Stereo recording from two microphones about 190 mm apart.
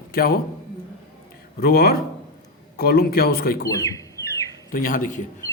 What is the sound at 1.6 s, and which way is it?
A man's voice, 50° left (ahead or behind).